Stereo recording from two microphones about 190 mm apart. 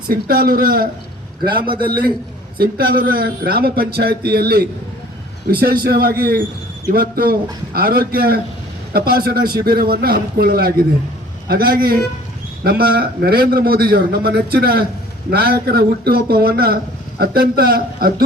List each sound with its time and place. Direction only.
0.1 s speech: 50° right (ahead or behind)
1.5 s a man's voice: 25° right (ahead or behind)
1.9 s a man's voice: 50° right (ahead or behind)